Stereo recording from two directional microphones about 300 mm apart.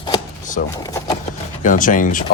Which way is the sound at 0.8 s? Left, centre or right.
Centre.